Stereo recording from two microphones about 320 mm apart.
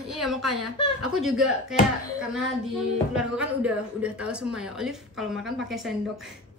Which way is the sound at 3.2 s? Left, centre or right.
Centre.